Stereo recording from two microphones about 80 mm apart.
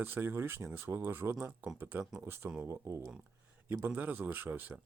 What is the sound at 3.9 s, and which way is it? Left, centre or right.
Speech, centre.